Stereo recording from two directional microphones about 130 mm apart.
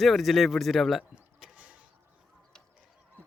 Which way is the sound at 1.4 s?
10° right (ahead or behind).